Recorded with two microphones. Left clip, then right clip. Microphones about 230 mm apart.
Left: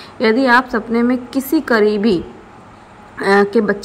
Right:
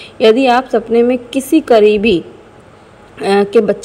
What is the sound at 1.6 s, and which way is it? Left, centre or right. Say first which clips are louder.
Speech: right 6 dB; centre.